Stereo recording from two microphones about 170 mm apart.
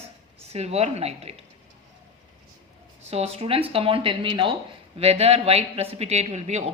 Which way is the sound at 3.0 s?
40° right (ahead or behind).